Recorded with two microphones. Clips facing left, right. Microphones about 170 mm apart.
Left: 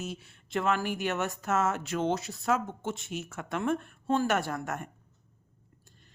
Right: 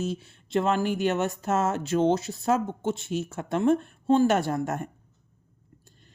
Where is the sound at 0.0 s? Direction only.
30° right (ahead or behind).